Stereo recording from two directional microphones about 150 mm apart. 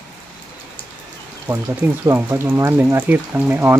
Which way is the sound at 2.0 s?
15° right (ahead or behind).